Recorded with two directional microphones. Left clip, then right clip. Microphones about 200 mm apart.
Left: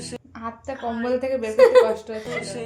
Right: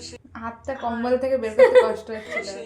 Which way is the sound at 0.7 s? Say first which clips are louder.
Right 2 dB; 5° left (ahead or behind).